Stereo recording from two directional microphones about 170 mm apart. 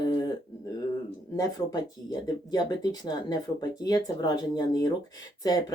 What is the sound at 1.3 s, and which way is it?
Speech, 20° left (ahead or behind).